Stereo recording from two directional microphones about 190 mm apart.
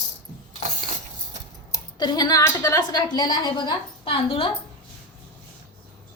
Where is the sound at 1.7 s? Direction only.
20° left (ahead or behind).